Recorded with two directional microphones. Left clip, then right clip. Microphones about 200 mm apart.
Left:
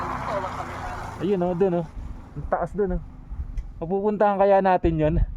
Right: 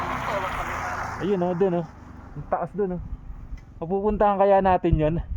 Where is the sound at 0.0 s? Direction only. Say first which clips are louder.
Right 1 dB; 40° right (ahead or behind).